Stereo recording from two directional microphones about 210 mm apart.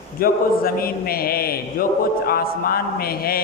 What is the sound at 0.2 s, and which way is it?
A man's voice, 45° left (ahead or behind).